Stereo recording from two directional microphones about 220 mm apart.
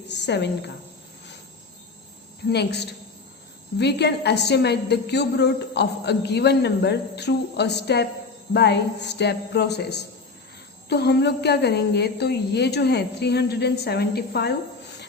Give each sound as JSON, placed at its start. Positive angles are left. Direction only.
{"t": 0.1, "sound": "cricket", "side_deg": 50}
{"t": 2.5, "sound": "a woman's voice", "side_deg": 50}